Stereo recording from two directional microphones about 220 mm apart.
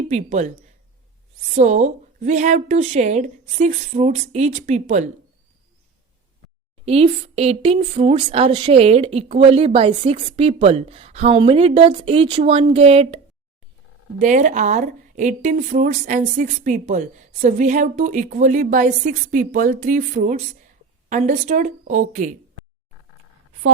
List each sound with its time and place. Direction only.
0.1 s a woman's voice: 30° right (ahead or behind)
1.5 s a woman's voice: 30° right (ahead or behind)
6.8 s speech: 25° right (ahead or behind)
14.2 s a woman's voice: 35° right (ahead or behind)